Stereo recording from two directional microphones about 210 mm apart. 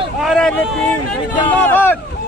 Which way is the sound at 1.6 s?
10° left (ahead or behind).